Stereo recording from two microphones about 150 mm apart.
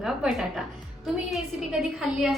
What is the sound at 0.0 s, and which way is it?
Speech, 5° right (ahead or behind).